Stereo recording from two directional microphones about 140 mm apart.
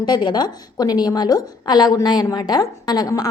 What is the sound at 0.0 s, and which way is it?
A woman's voice, 30° left (ahead or behind).